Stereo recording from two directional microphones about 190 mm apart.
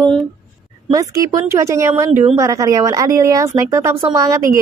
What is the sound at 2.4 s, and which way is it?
Speech, 15° right (ahead or behind).